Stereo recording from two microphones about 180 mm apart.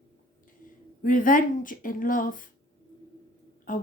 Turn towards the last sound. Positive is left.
turn(degrees=50)  # may be behind; listen again after turning